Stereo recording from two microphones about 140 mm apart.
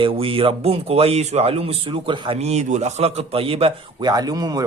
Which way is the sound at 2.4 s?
50° right (ahead or behind).